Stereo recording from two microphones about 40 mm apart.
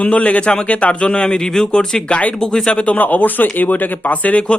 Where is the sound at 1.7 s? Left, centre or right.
Left.